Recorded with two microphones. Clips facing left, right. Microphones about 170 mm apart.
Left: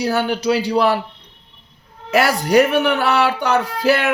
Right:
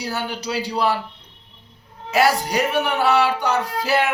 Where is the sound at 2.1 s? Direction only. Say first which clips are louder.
Left 5 dB; 60° left (ahead or behind).